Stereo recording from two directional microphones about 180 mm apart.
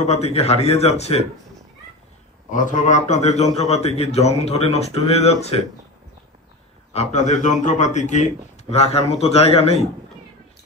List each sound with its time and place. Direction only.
0.0 s a man's voice: 35° left (ahead or behind)
2.5 s a man's voice: 45° left (ahead or behind)
6.9 s a man's voice: 40° left (ahead or behind)